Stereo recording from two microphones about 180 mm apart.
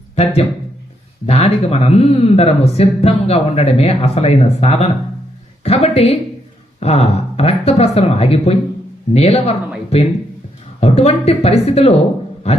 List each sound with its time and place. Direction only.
1.3 s speech: 35° left (ahead or behind)